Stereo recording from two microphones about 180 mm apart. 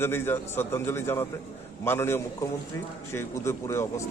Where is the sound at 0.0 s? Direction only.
15° left (ahead or behind).